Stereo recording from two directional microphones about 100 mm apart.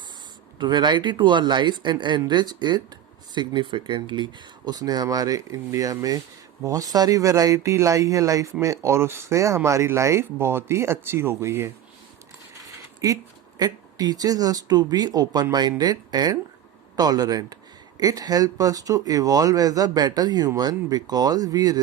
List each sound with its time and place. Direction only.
0.6 s speech: 50° right (ahead or behind); by 11.7 s 25° right (ahead or behind)
13.0 s speech: 35° right (ahead or behind)